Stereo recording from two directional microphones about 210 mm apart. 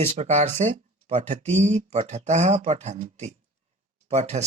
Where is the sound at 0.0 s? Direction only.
30° right (ahead or behind).